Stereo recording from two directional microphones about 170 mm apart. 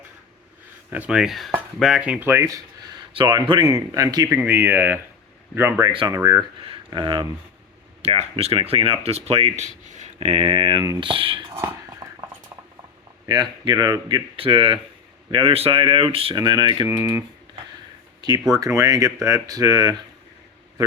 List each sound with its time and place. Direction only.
0.9 s speech: 5° right (ahead or behind)
3.1 s speech: 30° right (ahead or behind); by 5.9 s 15° right (ahead or behind)
5.9 s speech: 30° right (ahead or behind)
6.1 s speech: 20° right (ahead or behind)
8.0 s speech: 35° right (ahead or behind)
12.0 s a sound: 20° right (ahead or behind)
13.2 s speech: 25° right (ahead or behind)
18.5 s speech: 20° right (ahead or behind)